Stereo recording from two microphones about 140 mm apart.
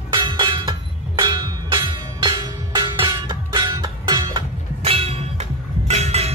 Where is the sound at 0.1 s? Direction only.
35° right (ahead or behind).